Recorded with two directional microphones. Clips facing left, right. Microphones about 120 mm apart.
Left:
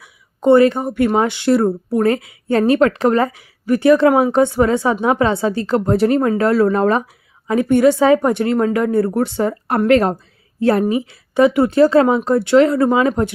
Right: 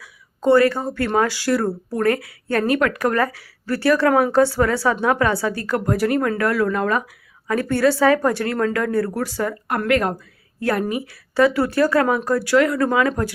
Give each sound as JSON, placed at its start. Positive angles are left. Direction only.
{"t": 0.0, "sound": "speech", "side_deg": 20}
{"t": 7.4, "sound": "speech", "side_deg": 20}